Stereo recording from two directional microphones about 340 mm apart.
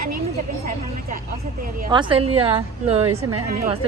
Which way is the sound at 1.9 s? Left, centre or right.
Centre.